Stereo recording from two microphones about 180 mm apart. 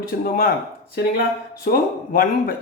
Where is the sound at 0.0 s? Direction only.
55° left (ahead or behind).